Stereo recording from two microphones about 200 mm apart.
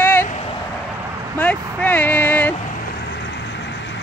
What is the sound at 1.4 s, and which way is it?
Speech, 5° left (ahead or behind).